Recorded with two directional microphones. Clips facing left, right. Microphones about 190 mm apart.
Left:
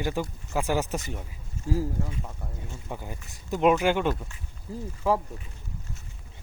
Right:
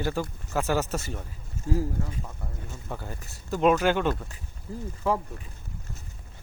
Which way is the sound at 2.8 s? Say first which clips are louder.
Right 1 dB; 15° left (ahead or behind).